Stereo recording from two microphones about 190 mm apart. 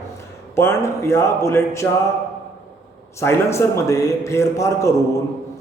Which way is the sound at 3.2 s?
15° left (ahead or behind).